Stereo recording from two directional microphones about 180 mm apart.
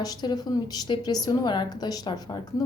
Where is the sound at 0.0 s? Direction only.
20° left (ahead or behind).